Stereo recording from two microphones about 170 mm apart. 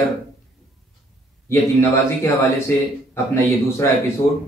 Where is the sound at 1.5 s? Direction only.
15° left (ahead or behind).